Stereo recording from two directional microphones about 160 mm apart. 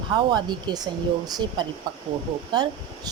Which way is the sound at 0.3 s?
25° right (ahead or behind).